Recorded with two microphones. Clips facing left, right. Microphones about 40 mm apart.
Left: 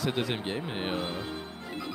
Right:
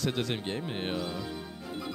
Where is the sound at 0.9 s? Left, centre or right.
Left.